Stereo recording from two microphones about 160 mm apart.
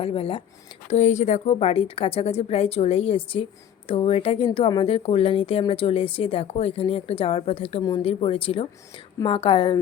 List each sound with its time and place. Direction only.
0.0 s a woman's voice: 35° left (ahead or behind)
0.9 s a woman's voice: 45° left (ahead or behind)